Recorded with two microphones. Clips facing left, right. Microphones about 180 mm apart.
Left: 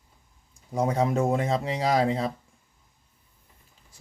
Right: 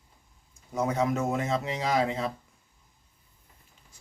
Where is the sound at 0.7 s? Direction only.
30° left (ahead or behind).